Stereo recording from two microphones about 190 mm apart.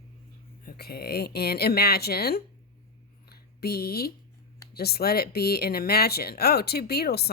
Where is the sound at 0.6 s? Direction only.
55° left (ahead or behind).